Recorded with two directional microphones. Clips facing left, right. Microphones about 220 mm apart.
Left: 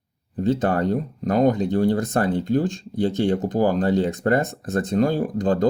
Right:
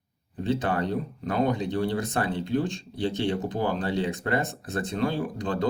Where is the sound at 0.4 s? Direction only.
40° left (ahead or behind).